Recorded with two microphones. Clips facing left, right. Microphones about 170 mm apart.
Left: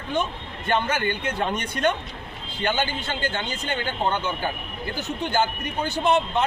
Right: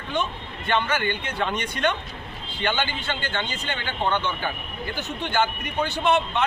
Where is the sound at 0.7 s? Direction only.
40° left (ahead or behind).